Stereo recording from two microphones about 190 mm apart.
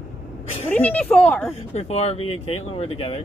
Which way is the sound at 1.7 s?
35° left (ahead or behind).